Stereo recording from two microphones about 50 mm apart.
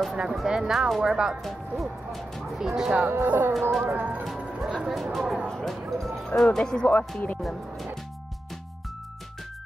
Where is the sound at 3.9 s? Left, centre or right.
Right.